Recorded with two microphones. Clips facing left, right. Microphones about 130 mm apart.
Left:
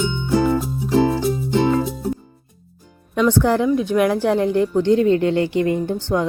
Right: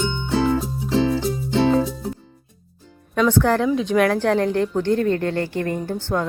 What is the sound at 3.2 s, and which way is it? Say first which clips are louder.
Speech: left 1 dB; 10° left (ahead or behind).